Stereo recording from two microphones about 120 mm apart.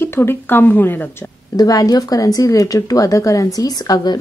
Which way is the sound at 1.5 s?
30° left (ahead or behind).